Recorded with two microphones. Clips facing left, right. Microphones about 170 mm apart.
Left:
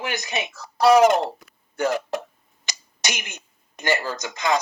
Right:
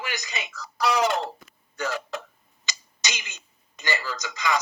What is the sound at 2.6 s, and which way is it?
Speech, 55° left (ahead or behind).